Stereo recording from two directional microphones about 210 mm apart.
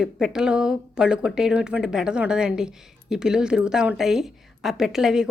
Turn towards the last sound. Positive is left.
turn(degrees=-5)  # may be behind; listen again after turning